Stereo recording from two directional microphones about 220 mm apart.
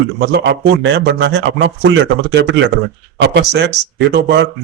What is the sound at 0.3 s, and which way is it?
A man's voice, 50° right (ahead or behind).